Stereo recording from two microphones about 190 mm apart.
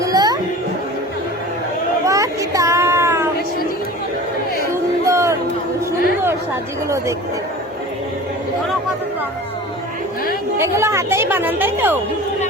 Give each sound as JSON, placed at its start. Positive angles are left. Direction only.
{"t": 0.0, "sound": "a sound", "side_deg": -20}
{"t": 2.0, "sound": "child singing", "side_deg": -15}
{"t": 4.7, "sound": "chatter", "side_deg": -15}
{"t": 10.6, "sound": "speech", "side_deg": -15}